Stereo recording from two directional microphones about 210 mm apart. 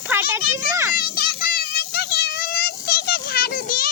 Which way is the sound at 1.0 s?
45° left (ahead or behind).